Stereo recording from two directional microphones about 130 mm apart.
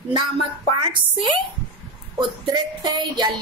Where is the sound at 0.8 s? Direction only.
35° right (ahead or behind).